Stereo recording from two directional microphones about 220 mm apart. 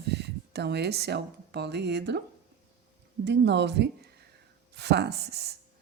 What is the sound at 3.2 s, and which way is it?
Speech, 50° right (ahead or behind).